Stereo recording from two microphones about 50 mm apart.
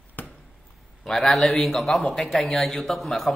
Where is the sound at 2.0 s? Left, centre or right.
Left.